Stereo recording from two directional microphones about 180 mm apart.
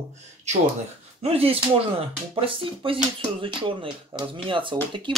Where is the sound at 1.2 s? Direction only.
35° right (ahead or behind).